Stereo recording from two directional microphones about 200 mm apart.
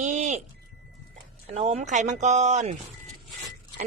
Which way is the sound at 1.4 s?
30° right (ahead or behind).